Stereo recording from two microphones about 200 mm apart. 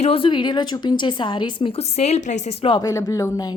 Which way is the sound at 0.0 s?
25° left (ahead or behind).